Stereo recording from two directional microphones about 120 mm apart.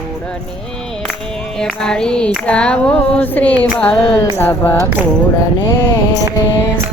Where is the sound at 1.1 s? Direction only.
5° left (ahead or behind).